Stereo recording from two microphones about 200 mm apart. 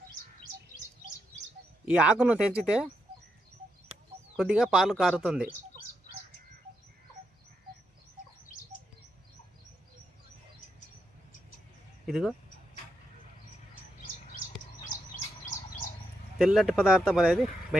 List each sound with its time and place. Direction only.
1.8 s speech: 5° right (ahead or behind)
4.4 s speech: centre (ahead or behind)
12.0 s speech: centre (ahead or behind)
15.1 s bird: 40° left (ahead or behind)
16.4 s speech: centre (ahead or behind)